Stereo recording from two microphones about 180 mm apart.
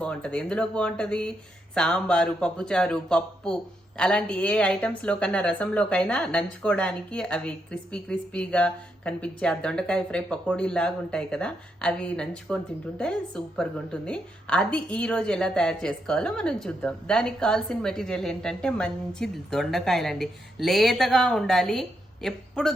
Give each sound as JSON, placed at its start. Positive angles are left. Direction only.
{"t": 0.0, "sound": "a woman's voice", "side_deg": 5}